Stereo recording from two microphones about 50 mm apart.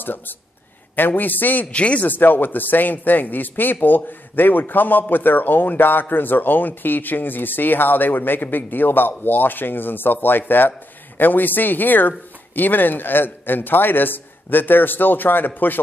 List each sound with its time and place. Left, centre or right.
0.0 s speech: left
1.7 s speech: left
2.0 s speech: left